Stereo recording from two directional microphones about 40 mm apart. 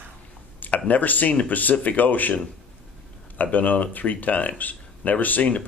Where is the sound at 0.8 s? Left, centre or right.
Left.